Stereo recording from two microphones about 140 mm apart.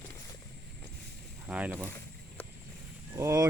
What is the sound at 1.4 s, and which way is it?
Speech, 10° right (ahead or behind).